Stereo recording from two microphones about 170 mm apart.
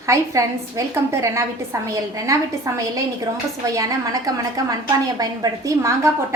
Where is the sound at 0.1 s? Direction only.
20° right (ahead or behind).